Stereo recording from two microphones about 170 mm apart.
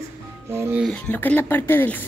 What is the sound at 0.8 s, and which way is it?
A woman's voice, 10° left (ahead or behind).